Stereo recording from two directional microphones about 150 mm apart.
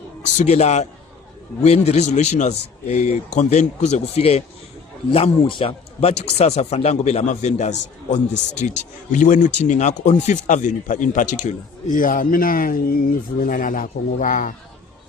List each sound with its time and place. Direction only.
0.3 s a man's voice: 50° left (ahead or behind); by 14.5 s 65° left (ahead or behind)